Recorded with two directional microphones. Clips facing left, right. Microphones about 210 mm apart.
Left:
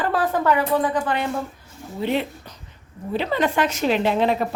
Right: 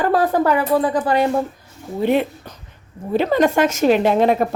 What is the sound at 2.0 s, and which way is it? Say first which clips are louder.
A woman's voice: right 6 dB; 50° right (ahead or behind).